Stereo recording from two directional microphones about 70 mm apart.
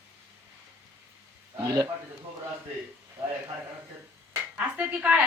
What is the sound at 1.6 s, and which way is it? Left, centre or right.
Speech, right.